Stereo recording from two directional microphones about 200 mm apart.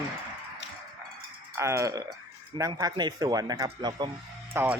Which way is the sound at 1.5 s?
15° right (ahead or behind).